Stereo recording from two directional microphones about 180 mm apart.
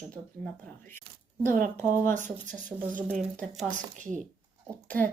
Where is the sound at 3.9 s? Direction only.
45° right (ahead or behind).